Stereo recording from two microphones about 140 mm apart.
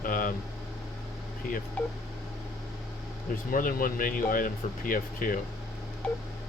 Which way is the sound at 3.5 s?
85° left.